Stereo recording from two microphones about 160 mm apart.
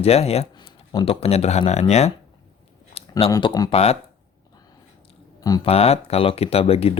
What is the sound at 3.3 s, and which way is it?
Speech, 25° left (ahead or behind).